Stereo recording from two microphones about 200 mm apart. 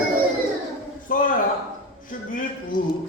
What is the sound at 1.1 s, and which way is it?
Speech, 40° left (ahead or behind).